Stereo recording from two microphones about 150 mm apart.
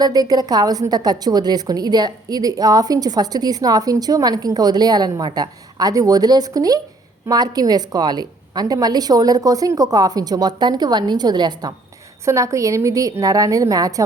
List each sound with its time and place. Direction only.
0.0 s a woman's voice: 25° right (ahead or behind)